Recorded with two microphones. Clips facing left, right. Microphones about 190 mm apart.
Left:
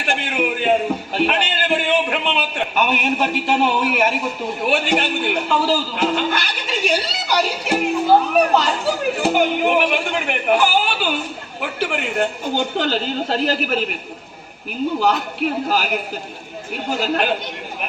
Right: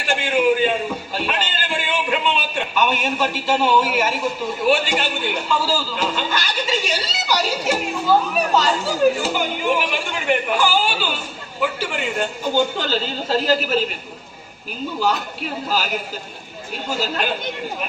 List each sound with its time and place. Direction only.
0.1 s a man's voice: 60° left (ahead or behind)
1.1 s a sound: 60° left (ahead or behind)
4.6 s speech: 60° left (ahead or behind)
15.0 s speech: 60° left (ahead or behind)
16.9 s speech: 60° left (ahead or behind)